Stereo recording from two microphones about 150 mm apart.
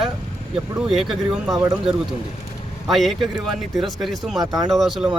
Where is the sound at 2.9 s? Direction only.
Centre (ahead or behind).